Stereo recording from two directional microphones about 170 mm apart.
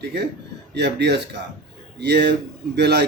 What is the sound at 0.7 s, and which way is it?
Speech, 85° right.